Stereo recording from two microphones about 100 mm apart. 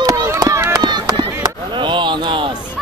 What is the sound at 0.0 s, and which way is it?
Run, 35° right (ahead or behind).